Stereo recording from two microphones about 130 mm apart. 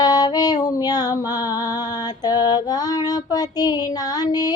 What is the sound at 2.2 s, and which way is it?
Female singing, 30° left (ahead or behind).